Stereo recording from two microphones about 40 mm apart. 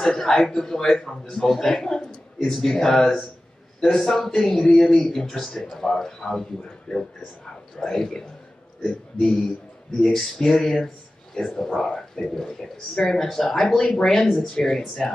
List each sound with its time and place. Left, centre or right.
0.0 s a man's voice: centre